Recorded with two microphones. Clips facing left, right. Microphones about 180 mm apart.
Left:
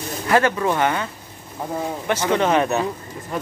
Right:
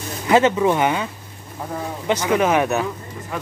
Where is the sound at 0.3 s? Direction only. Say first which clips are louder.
Right 3 dB; 20° right (ahead or behind).